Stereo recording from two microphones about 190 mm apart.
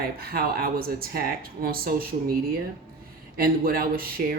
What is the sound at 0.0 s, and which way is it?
Speech, 55° right (ahead or behind).